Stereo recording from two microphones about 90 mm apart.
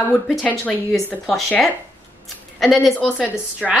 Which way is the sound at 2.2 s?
Centre (ahead or behind).